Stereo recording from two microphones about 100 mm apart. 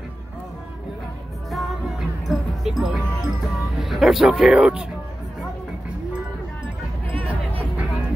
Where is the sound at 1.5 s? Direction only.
Centre (ahead or behind).